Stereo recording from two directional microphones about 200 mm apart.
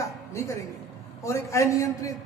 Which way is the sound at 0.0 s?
15° left (ahead or behind).